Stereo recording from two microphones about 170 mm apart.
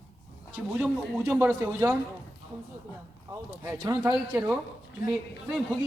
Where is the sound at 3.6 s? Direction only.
20° right (ahead or behind).